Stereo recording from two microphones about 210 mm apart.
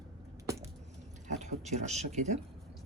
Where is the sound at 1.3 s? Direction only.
35° right (ahead or behind).